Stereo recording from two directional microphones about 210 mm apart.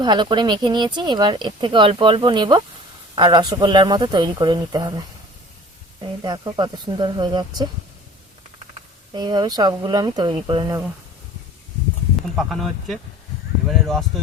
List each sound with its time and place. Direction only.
0.0 s speech: 20° right (ahead or behind)
6.0 s speech: 20° right (ahead or behind)
9.1 s speech: 20° right (ahead or behind)
12.4 s speech: centre (ahead or behind)
13.7 s a sound: centre (ahead or behind)